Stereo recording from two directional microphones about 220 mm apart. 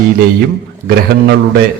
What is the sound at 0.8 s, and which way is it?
Speech, 45° right (ahead or behind).